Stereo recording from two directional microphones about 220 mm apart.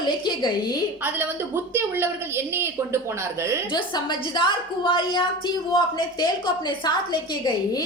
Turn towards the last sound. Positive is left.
turn(degrees=20)  # may be behind; listen again after turning